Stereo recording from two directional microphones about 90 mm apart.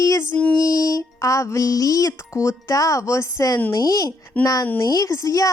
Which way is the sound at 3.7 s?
45° left (ahead or behind).